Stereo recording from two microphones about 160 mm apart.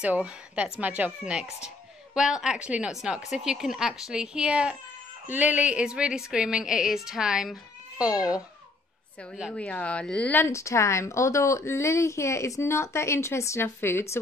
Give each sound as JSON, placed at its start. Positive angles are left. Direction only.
{"t": 0.0, "sound": "a woman's voice", "side_deg": -10}
{"t": 9.5, "sound": "speech", "side_deg": 10}